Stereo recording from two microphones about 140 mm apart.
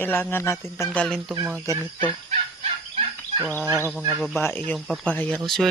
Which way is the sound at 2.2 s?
45° right (ahead or behind).